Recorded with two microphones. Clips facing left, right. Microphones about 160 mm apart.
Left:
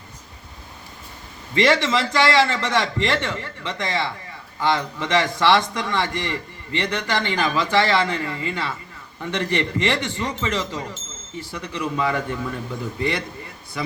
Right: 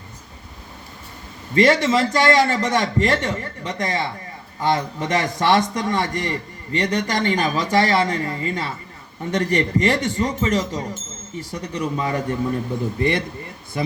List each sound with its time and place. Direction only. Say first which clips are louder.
1.5 s a man's voice: right 3 dB; 45° right (ahead or behind)